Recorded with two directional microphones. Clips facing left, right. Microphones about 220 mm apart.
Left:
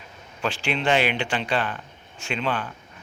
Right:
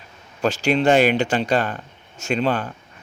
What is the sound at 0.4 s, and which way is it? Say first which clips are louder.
Speech: right 7 dB; 40° right (ahead or behind).